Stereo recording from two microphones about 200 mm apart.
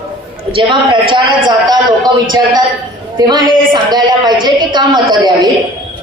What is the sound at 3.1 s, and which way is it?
A woman's voice, 20° right (ahead or behind).